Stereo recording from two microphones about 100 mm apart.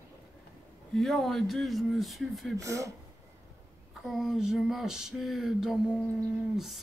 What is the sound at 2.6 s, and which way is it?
Speech, 35° right (ahead or behind).